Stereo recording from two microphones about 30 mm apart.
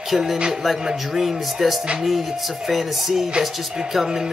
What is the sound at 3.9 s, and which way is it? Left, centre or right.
Music, centre.